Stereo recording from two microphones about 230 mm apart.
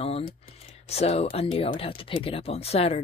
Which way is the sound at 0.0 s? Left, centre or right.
Left.